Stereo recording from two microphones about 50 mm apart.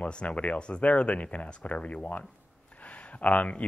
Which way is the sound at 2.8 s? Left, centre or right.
Left.